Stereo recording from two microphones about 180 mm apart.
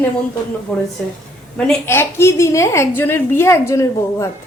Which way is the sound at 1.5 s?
10° left (ahead or behind).